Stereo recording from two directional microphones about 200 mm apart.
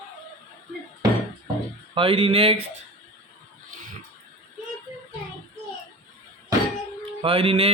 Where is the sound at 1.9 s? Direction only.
25° right (ahead or behind).